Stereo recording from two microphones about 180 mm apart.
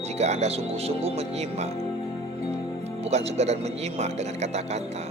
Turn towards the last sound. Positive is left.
turn(degrees=-40)  # may be behind; listen again after turning